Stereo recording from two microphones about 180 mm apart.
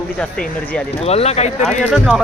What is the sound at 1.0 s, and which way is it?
Speech, 35° left (ahead or behind).